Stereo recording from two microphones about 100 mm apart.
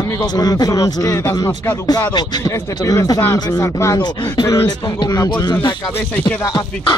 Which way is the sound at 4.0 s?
45° left (ahead or behind).